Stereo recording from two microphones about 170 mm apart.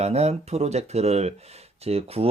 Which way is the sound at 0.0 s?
40° right (ahead or behind).